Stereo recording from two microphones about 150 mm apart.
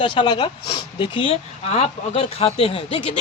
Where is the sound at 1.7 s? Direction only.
45° left (ahead or behind).